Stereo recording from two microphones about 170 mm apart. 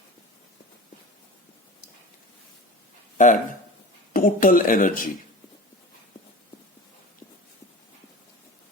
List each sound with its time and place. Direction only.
3.2 s speech: 45° left (ahead or behind)